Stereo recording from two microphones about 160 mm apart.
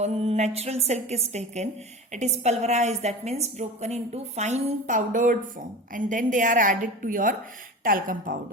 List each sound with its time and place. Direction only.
0.0 s a woman's voice: 40° right (ahead or behind); by 8.4 s 60° right (ahead or behind)